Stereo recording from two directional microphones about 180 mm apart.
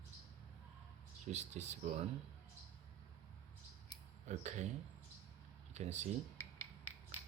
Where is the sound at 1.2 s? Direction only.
40° right (ahead or behind).